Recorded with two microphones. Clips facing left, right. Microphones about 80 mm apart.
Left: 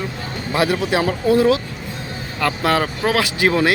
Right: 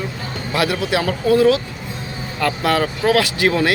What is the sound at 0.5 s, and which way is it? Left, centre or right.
Speech, left.